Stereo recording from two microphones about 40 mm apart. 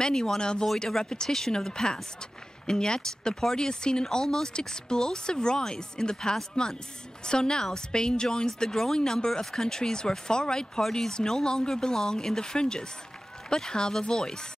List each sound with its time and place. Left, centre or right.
0.0 s speech: centre